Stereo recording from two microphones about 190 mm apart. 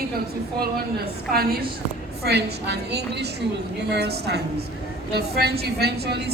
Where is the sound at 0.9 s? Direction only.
55° right (ahead or behind).